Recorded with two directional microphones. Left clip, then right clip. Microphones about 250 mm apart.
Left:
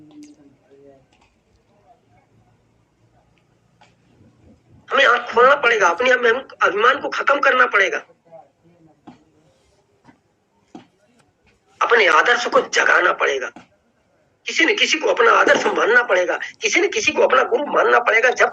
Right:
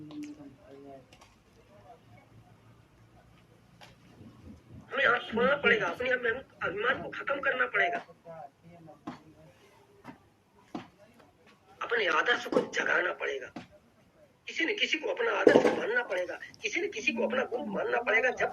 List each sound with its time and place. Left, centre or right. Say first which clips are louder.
4.9 s a man's voice: left 12 dB; left
10.7 s a sound: even; centre
11.8 s speech: left 15 dB; left